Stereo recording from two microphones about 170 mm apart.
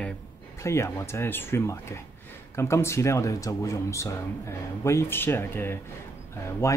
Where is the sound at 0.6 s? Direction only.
15° left (ahead or behind).